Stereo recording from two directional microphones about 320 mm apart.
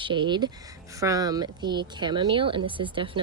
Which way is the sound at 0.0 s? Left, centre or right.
Centre.